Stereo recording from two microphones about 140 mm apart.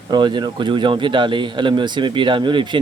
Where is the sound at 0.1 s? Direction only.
35° right (ahead or behind).